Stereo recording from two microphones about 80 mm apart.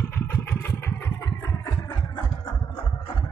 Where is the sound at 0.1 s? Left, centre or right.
Left.